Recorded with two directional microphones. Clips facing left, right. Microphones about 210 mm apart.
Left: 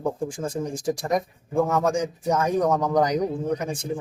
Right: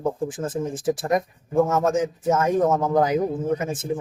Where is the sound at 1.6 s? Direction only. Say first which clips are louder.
Right 1 dB; 20° right (ahead or behind).